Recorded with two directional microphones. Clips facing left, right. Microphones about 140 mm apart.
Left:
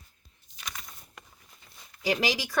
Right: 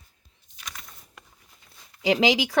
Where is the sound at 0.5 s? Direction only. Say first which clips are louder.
Left 1 dB; centre (ahead or behind).